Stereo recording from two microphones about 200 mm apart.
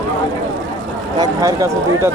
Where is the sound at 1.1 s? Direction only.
15° right (ahead or behind).